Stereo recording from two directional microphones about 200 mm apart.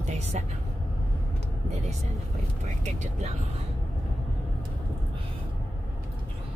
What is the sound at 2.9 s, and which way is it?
Speech, 35° right (ahead or behind).